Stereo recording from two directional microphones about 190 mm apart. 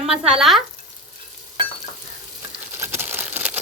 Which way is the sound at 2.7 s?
15° right (ahead or behind).